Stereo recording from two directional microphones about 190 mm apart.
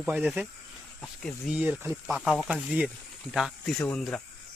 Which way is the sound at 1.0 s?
5° left (ahead or behind).